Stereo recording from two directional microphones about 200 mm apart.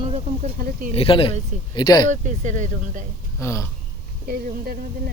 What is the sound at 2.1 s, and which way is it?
Speech, 40° right (ahead or behind).